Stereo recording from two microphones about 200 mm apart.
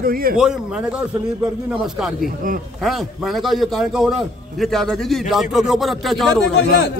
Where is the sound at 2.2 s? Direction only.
45° right (ahead or behind).